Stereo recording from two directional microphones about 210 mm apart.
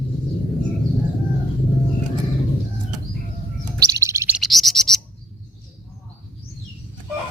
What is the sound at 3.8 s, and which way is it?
Bird, 15° right (ahead or behind).